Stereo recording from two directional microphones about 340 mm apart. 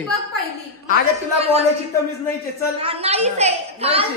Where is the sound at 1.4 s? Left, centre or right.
Centre.